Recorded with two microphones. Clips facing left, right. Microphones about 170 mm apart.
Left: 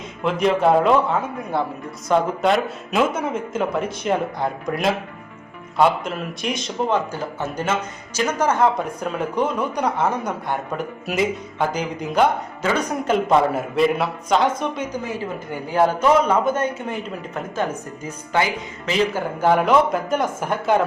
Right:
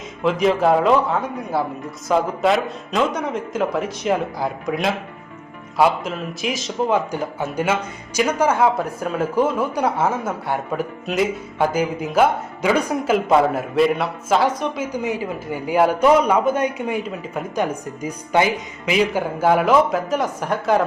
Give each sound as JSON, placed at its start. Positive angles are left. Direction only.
{"t": 0.2, "sound": "a man's voice", "side_deg": 0}